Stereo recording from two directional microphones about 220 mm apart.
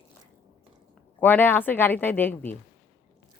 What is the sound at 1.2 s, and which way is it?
A woman's voice, 10° left (ahead or behind).